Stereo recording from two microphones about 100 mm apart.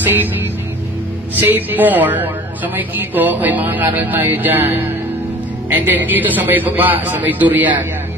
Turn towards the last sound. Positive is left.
turn(degrees=-20)  # may be behind; listen again after turning